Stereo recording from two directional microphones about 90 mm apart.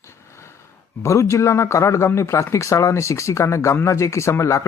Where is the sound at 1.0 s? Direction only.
30° left (ahead or behind).